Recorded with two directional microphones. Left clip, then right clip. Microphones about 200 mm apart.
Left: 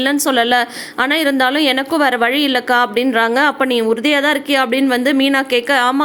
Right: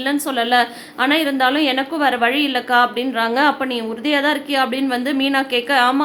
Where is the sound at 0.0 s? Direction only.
35° left (ahead or behind).